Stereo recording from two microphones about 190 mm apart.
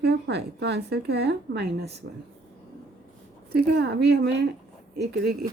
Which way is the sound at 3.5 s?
60° right (ahead or behind).